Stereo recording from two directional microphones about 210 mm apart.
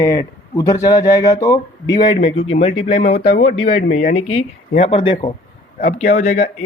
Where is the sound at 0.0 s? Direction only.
15° left (ahead or behind).